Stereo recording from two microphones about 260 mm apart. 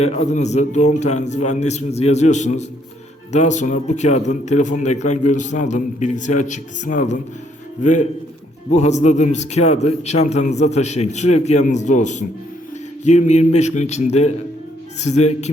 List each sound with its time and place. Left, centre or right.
0.0 s a man's voice: left